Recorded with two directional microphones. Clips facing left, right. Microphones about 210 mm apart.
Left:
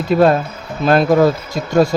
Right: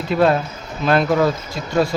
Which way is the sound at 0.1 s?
40° left (ahead or behind).